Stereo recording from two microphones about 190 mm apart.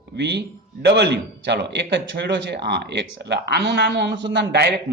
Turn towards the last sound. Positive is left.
turn(degrees=-60)  # may be behind; listen again after turning